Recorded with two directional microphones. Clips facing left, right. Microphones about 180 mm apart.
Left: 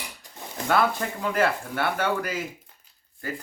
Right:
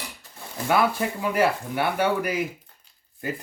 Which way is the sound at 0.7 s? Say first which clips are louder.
Right 1 dB; 10° right (ahead or behind).